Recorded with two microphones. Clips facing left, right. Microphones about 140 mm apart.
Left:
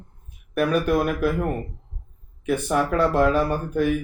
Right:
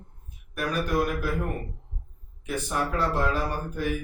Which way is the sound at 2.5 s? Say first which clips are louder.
Left 7 dB; 60° left (ahead or behind).